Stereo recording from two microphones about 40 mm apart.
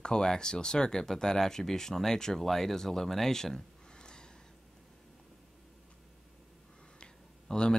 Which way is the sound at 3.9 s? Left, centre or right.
Centre.